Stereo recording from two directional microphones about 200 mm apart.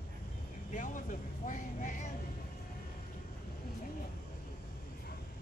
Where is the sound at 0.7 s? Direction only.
40° left (ahead or behind).